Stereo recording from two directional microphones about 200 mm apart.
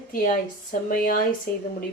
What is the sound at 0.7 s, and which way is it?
Speech, 40° left (ahead or behind).